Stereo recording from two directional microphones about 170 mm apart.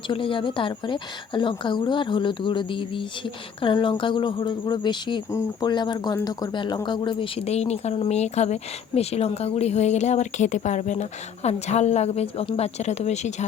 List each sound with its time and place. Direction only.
0.1 s speech: 30° left (ahead or behind)